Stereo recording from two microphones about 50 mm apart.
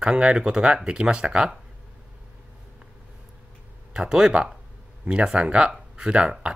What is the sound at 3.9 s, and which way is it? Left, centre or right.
Speech, centre.